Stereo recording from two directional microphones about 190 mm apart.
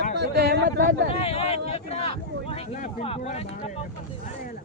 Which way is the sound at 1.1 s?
30° left (ahead or behind).